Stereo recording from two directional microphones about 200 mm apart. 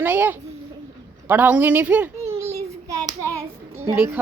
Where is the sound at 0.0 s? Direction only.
10° right (ahead or behind).